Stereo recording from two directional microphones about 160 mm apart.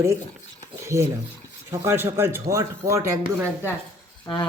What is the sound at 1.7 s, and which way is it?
Speech, 15° right (ahead or behind).